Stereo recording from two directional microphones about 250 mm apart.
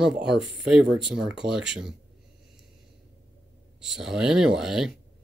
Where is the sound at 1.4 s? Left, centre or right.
Centre.